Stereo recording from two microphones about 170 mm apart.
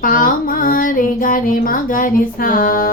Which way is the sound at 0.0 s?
55° left (ahead or behind).